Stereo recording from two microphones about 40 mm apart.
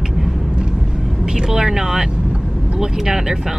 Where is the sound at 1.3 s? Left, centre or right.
Centre.